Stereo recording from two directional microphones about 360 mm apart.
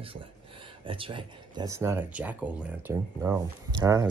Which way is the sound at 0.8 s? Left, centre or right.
Centre.